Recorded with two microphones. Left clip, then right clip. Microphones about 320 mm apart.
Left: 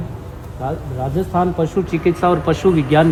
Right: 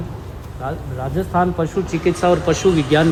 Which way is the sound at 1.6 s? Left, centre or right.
Left.